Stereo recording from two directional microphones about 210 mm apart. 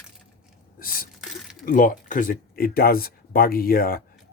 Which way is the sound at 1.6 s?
40° left (ahead or behind).